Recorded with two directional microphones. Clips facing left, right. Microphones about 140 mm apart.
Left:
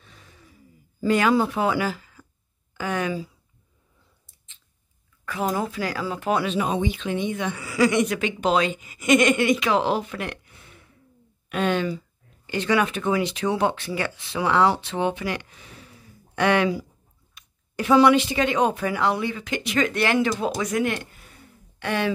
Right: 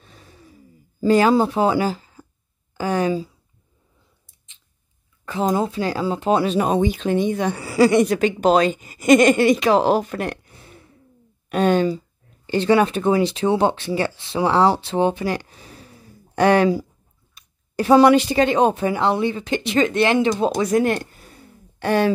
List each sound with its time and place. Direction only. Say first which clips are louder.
0.0 s gasp: right 5 dB; 35° right (ahead or behind)
1.0 s a woman's voice: right 5 dB; 30° right (ahead or behind)
5.2 s speech: right 5 dB; 30° right (ahead or behind)
6.4 s a woman's voice: right 5 dB; 40° right (ahead or behind)